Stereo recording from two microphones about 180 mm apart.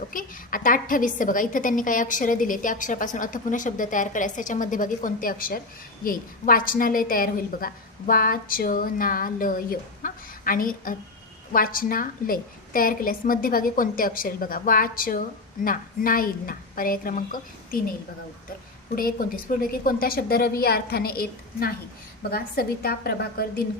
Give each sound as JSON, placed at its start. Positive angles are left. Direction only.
{"t": 0.1, "sound": "a woman's voice", "side_deg": 50}
{"t": 18.9, "sound": "a woman's voice", "side_deg": 55}